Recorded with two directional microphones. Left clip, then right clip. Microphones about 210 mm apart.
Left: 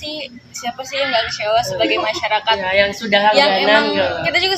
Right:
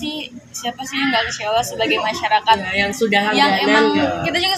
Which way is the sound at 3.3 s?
30° left (ahead or behind).